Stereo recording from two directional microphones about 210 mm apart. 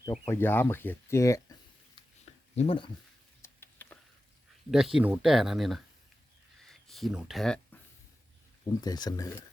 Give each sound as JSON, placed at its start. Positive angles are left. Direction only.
{"t": 0.3, "sound": "speech", "side_deg": 10}
{"t": 2.6, "sound": "speech", "side_deg": 25}
{"t": 3.4, "sound": "a sound", "side_deg": 10}
{"t": 4.7, "sound": "speech", "side_deg": 0}
{"t": 8.8, "sound": "speech", "side_deg": 20}